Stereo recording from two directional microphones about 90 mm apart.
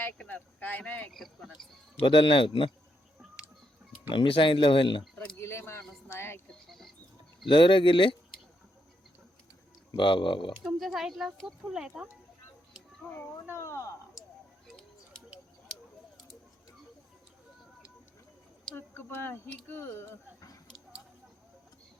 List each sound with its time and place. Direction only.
0.0 s speech: 15° left (ahead or behind)
1.1 s speech: centre (ahead or behind)
2.0 s speech: 65° left (ahead or behind)
4.1 s speech: 70° left (ahead or behind)
5.1 s a sound: 10° left (ahead or behind)
5.4 s a sound: 30° left (ahead or behind)
6.7 s a sound: centre (ahead or behind)
7.4 s speech: 70° left (ahead or behind)
9.9 s speech: 65° left (ahead or behind)
10.6 s speech: 5° right (ahead or behind)
13.1 s speech: 25° left (ahead or behind)
18.7 s speech: 25° left (ahead or behind)